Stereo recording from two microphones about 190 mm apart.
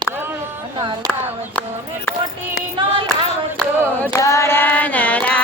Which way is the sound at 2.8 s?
25° right (ahead or behind).